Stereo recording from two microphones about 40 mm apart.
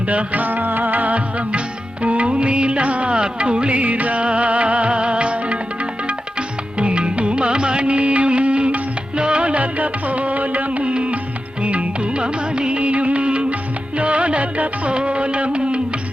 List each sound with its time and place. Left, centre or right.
0.1 s music: right
6.7 s music: right